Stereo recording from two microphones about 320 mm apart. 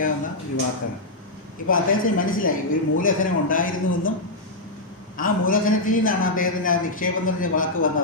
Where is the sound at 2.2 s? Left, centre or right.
Left.